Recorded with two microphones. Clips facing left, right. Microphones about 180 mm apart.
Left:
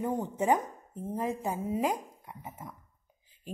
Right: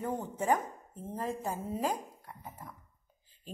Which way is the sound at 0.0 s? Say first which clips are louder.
Left 4 dB; 20° left (ahead or behind).